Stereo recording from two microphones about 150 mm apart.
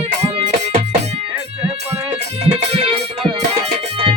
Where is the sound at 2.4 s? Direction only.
40° right (ahead or behind).